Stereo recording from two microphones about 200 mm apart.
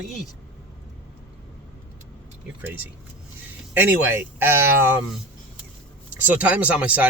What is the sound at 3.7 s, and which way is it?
Speech, 10° right (ahead or behind).